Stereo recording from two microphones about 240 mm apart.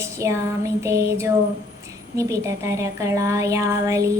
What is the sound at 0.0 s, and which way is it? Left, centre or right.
Speech, centre.